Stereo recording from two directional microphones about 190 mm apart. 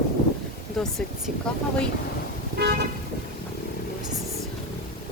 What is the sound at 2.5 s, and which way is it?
Vehicle, 55° right (ahead or behind).